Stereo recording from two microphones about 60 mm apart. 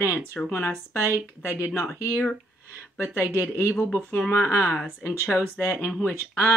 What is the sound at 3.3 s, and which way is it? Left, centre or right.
Speech, left.